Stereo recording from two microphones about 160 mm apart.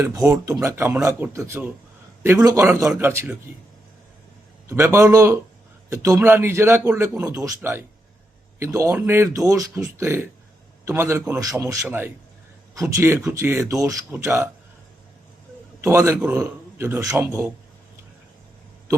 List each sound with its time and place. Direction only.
0.0 s speech: 20° right (ahead or behind)
4.7 s speech: 15° right (ahead or behind)
15.8 s a man's voice: 15° right (ahead or behind)